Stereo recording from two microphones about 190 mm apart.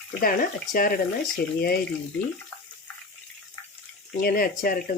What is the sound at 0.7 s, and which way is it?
Speech, 50° left (ahead or behind).